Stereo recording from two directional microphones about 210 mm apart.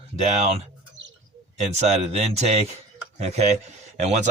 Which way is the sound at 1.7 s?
30° right (ahead or behind).